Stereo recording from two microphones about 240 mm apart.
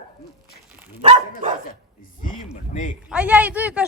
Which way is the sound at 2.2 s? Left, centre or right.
Left.